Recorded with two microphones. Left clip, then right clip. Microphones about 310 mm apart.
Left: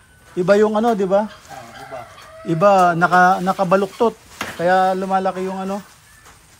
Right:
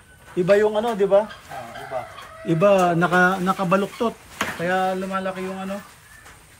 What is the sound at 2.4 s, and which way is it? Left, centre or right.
Speech, centre.